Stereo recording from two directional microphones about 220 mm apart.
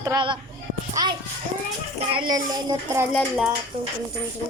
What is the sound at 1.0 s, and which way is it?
Music, 15° right (ahead or behind).